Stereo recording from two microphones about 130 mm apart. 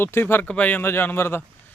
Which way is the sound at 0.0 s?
15° left (ahead or behind).